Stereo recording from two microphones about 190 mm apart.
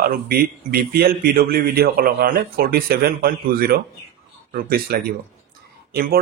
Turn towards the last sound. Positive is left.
turn(degrees=-55)  # may be behind; listen again after turning